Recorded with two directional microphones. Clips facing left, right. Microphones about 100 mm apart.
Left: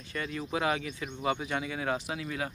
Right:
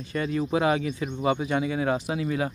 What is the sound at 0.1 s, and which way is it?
Speech, 20° right (ahead or behind).